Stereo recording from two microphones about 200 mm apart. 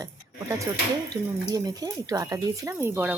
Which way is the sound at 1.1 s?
20° right (ahead or behind).